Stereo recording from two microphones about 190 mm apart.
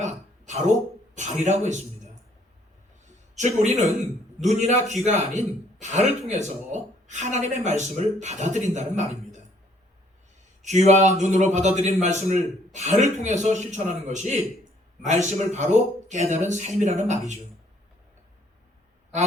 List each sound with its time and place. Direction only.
0.0 s a sound: 35° right (ahead or behind)
1.1 s a man's voice: 40° right (ahead or behind)
3.3 s a man's voice: 35° right (ahead or behind)
10.6 s a man's voice: 35° right (ahead or behind)